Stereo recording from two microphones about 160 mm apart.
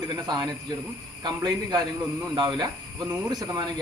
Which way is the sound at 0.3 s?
25° right (ahead or behind).